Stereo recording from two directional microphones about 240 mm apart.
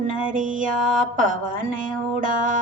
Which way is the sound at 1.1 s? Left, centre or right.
Right.